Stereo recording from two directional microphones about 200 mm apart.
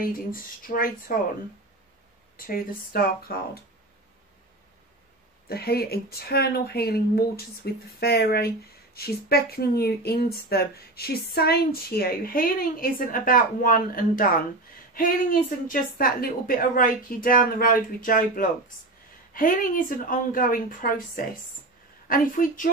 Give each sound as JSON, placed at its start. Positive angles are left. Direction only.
{"t": 0.0, "sound": "a woman's voice", "side_deg": 45}
{"t": 2.3, "sound": "a woman's voice", "side_deg": 45}
{"t": 5.5, "sound": "a woman's voice", "side_deg": 50}
{"t": 15.6, "sound": "a woman's voice", "side_deg": 45}